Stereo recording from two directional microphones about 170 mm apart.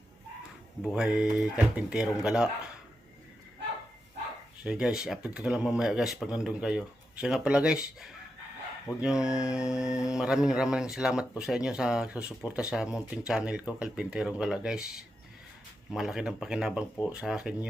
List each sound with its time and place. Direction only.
0.8 s speech: 5° right (ahead or behind)
4.6 s speech: 5° right (ahead or behind)